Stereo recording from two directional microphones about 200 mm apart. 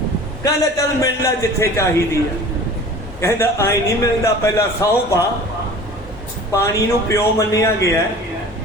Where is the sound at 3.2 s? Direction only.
15° left (ahead or behind).